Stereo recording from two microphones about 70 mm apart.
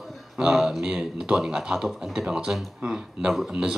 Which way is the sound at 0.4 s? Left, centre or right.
Centre.